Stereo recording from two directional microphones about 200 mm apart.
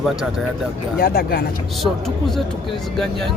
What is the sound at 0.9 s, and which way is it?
Speech, 50° left (ahead or behind).